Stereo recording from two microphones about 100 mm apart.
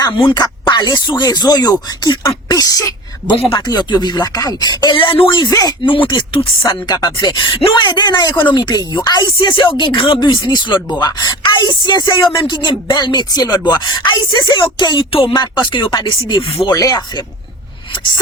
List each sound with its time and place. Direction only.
0.2 s speech: 45° left (ahead or behind)
4.9 s speech: 65° left (ahead or behind)
5.4 s speech: 40° left (ahead or behind)
6.1 s speech: 55° left (ahead or behind)
6.7 s speech: 45° left (ahead or behind)
8.5 s speech: 40° left (ahead or behind)
16.4 s speech: 70° left (ahead or behind)
16.6 s speech: 40° left (ahead or behind)